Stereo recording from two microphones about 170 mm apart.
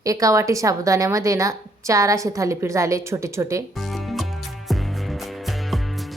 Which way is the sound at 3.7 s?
Centre (ahead or behind).